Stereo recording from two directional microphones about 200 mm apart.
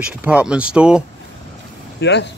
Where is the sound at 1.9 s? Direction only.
60° left (ahead or behind).